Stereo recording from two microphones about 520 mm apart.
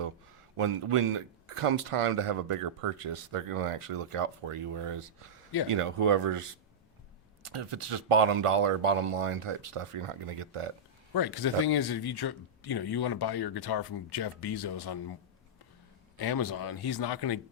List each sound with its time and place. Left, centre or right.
0.5 s speech: right
7.4 s speech: right
11.1 s speech: left